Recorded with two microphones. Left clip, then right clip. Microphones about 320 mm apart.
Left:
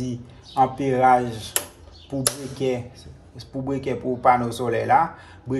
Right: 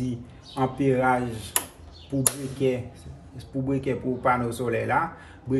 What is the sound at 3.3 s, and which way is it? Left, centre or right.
Speech, left.